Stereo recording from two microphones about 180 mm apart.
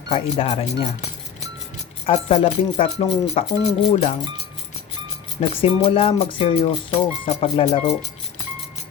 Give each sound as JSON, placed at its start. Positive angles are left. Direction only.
{"t": 0.1, "sound": "speech", "side_deg": 30}
{"t": 2.0, "sound": "speech", "side_deg": 30}
{"t": 5.4, "sound": "speech", "side_deg": 30}